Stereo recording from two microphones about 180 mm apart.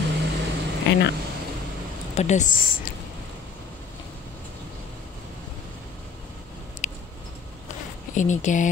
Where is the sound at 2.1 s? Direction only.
40° left (ahead or behind).